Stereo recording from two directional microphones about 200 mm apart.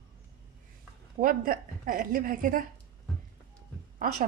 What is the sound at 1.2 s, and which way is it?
Speech, 45° right (ahead or behind).